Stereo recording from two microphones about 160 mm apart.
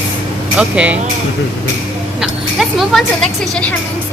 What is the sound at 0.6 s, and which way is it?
Speech, 5° right (ahead or behind).